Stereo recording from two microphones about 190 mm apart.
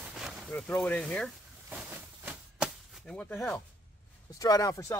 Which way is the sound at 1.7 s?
5° right (ahead or behind).